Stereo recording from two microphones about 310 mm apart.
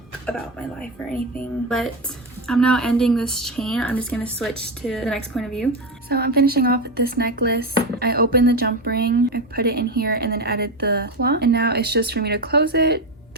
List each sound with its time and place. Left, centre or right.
0.3 s speech: centre
6.1 s speech: right